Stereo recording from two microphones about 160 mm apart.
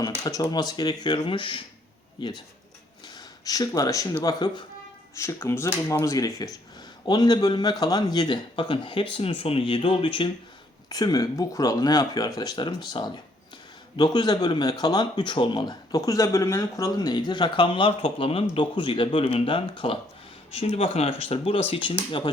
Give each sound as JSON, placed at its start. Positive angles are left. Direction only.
{"t": 0.0, "sound": "speech", "side_deg": 20}
{"t": 3.4, "sound": "speech", "side_deg": 20}